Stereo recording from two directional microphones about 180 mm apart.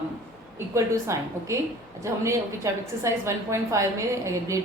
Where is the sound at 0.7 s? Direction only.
15° right (ahead or behind).